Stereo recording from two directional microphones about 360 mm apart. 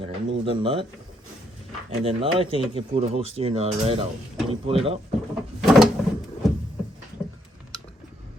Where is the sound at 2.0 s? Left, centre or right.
Centre.